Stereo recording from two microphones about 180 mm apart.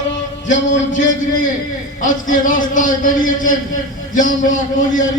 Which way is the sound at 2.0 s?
50° left (ahead or behind).